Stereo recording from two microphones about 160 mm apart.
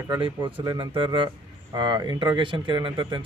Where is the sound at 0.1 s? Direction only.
30° right (ahead or behind).